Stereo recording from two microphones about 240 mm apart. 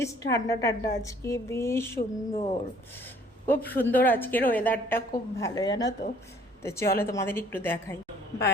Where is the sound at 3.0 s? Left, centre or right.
Centre.